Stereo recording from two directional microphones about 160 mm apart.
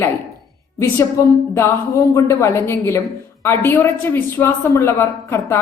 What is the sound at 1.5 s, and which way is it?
A man's voice, 20° left (ahead or behind).